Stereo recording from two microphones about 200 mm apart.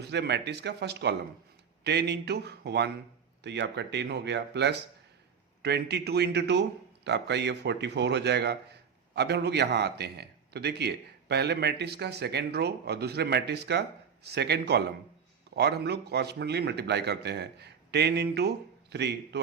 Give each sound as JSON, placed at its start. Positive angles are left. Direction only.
{"t": 0.0, "sound": "a man's voice", "side_deg": -55}